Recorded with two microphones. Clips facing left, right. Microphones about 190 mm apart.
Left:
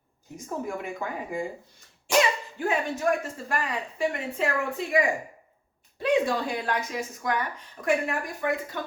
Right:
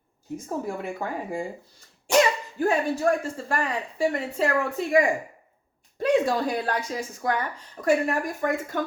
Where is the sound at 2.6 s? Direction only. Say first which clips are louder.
Right 4 dB; 35° right (ahead or behind).